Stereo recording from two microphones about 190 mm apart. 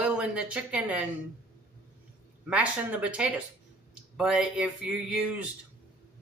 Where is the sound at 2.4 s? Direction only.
5° right (ahead or behind).